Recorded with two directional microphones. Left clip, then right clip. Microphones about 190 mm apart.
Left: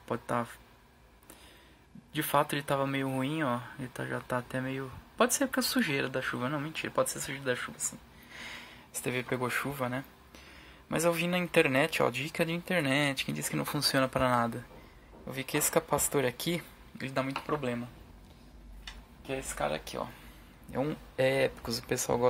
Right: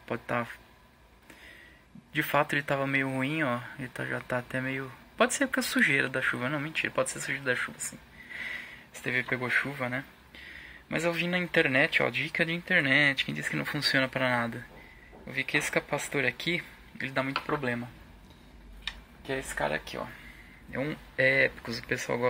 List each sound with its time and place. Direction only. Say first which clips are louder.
0.0 s a man's voice: right 1 dB; centre (ahead or behind)
2.1 s a man's voice: right 2 dB; centre (ahead or behind)
8.3 s sniff: right 7 dB; 15° left (ahead or behind)
9.0 s speech: right 3 dB; 15° left (ahead or behind)
17.4 s a man's voice: right 2 dB; centre (ahead or behind)
19.6 s speech: even; 10° left (ahead or behind)